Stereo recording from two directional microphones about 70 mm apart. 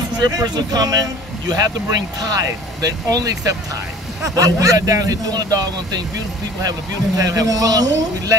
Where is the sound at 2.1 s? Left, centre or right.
Right.